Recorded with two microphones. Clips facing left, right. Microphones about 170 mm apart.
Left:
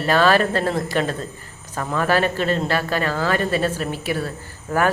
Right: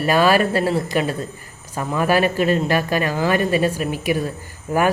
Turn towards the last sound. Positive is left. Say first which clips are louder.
# right 1 dB
turn(degrees=-15)  # may be behind; listen again after turning